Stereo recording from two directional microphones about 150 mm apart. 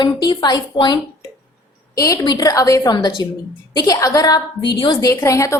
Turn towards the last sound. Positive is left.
turn(degrees=20)  # may be behind; listen again after turning